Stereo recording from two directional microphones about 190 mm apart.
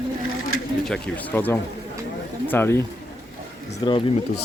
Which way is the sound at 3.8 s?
25° left (ahead or behind).